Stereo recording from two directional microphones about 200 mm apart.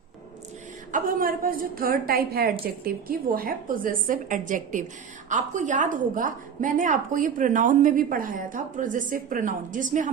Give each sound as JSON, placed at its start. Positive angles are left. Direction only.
{"t": 0.9, "sound": "a woman's voice", "side_deg": -45}